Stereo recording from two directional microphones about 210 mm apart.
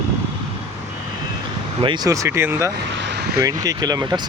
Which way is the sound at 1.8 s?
20° right (ahead or behind).